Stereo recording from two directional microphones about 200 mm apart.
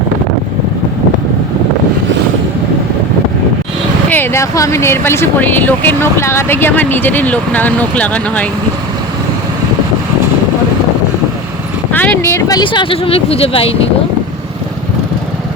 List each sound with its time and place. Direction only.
4.1 s speech: 10° left (ahead or behind)
11.9 s speech: 10° left (ahead or behind); by 13.7 s 30° left (ahead or behind)